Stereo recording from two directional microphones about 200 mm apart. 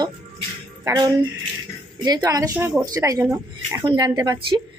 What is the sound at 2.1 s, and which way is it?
A woman's voice, 15° right (ahead or behind).